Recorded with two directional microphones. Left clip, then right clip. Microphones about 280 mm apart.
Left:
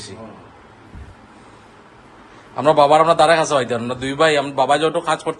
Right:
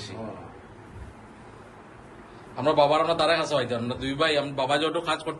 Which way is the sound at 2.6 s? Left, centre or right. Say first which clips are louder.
Left 9 dB; left.